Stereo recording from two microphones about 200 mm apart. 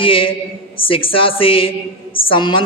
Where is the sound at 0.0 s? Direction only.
25° left (ahead or behind).